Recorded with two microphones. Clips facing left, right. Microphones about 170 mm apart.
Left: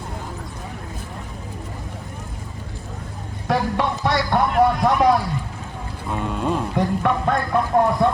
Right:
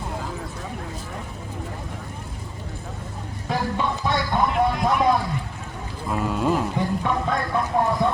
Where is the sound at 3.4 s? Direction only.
75° left (ahead or behind).